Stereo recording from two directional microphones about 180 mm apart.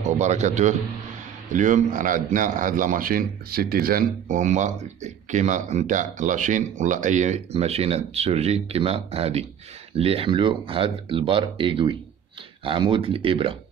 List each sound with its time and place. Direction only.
0.0 s a man's voice: 40° right (ahead or behind)